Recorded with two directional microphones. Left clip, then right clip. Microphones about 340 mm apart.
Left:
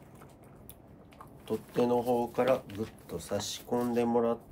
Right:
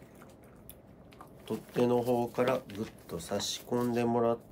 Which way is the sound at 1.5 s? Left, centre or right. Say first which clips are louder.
Left 1 dB; centre.